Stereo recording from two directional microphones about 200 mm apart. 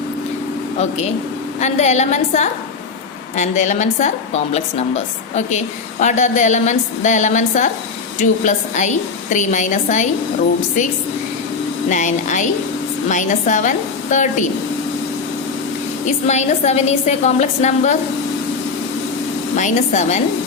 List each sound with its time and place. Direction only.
1.6 s a woman's voice: 35° left (ahead or behind)
11.9 s a woman's voice: 40° left (ahead or behind)
16.0 s a woman's voice: 35° left (ahead or behind)
19.5 s a woman's voice: 35° left (ahead or behind)